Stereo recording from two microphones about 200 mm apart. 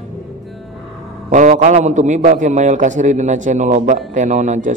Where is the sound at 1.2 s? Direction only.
40° right (ahead or behind).